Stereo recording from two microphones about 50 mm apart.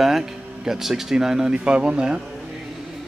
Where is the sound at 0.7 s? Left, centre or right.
Centre.